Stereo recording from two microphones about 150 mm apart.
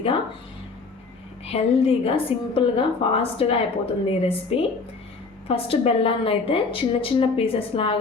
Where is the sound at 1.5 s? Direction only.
40° left (ahead or behind).